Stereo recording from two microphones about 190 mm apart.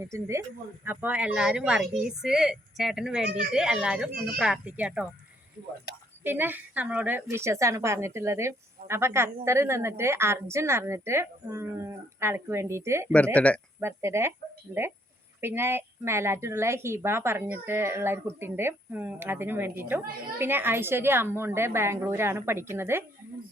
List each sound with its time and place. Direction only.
0.0 s a woman's voice: 15° right (ahead or behind)
6.2 s a woman's voice: 10° right (ahead or behind)
13.3 s speech: 5° left (ahead or behind)
13.7 s a woman's voice: 15° right (ahead or behind)